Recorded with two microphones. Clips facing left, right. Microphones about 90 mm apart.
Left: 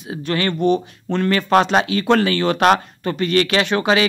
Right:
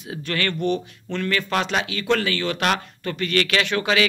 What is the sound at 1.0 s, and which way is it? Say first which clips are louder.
Speech: left 6 dB; 35° left (ahead or behind).